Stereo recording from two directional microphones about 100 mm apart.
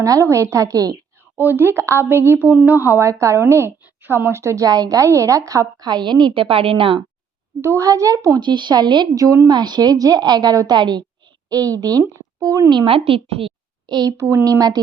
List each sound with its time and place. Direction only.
0.0 s a woman's voice: 30° right (ahead or behind)
1.4 s speech: 20° right (ahead or behind)
3.0 s a woman's voice: 30° right (ahead or behind); by 6.2 s 45° right (ahead or behind)
6.3 s a woman's voice: 65° right (ahead or behind)
7.6 s a woman's voice: 30° right (ahead or behind)
8.4 s a woman's voice: 50° right (ahead or behind)
9.2 s a woman's voice: 35° right (ahead or behind)
9.5 s a woman's voice: 45° right (ahead or behind)
11.6 s a woman's voice: 40° right (ahead or behind)
12.7 s a woman's voice: 65° right (ahead or behind)
13.8 s a woman's voice: 40° right (ahead or behind)